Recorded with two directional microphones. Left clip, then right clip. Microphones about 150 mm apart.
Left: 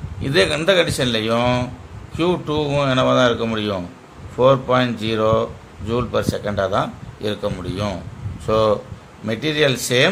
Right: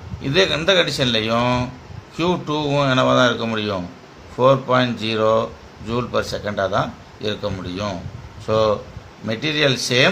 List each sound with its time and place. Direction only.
0.2 s speech: 20° left (ahead or behind)